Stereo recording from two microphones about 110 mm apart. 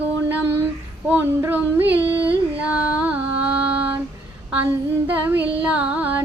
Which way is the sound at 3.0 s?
15° right (ahead or behind).